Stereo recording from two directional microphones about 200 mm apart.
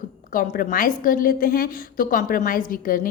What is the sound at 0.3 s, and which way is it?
A woman's voice, 45° left (ahead or behind).